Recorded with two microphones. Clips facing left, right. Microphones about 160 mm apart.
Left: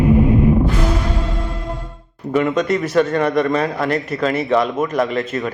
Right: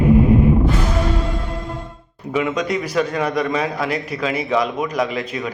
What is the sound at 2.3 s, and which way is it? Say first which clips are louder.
A man's voice: left 3 dB; centre (ahead or behind).